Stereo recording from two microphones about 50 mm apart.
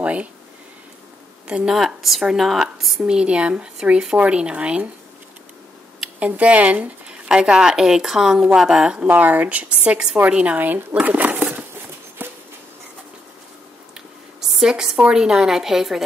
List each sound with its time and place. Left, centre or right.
0.0 s speech: right
1.5 s speech: right
1.8 s speech: centre
3.1 s speech: centre
6.1 s speech: right
7.2 s speech: centre
8.9 s speech: right; by 10.1 s centre
10.3 s speech: right
12.2 s a sound: right
14.5 s speech: centre